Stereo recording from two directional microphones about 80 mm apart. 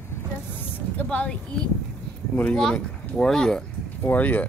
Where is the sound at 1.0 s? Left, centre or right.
Centre.